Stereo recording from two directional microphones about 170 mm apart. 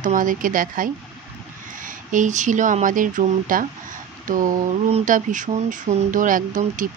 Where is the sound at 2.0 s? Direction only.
45° right (ahead or behind).